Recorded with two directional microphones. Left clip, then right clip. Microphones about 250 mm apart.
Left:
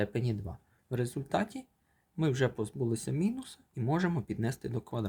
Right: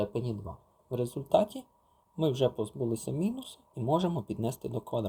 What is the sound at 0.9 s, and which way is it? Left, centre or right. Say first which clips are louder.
Speech: right 6 dB; left.